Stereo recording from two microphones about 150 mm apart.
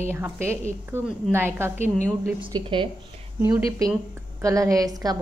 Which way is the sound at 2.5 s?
35° right (ahead or behind).